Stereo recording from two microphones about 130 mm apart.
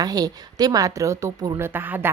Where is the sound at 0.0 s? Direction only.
30° right (ahead or behind).